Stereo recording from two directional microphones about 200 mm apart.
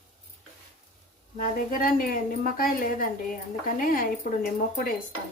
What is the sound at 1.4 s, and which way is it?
A woman's voice, 45° left (ahead or behind).